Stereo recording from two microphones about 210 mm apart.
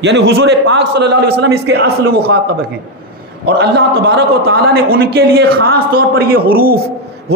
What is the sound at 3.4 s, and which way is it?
A man's voice, 50° right (ahead or behind).